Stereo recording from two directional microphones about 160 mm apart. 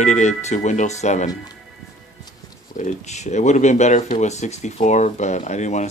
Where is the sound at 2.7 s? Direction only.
45° left (ahead or behind).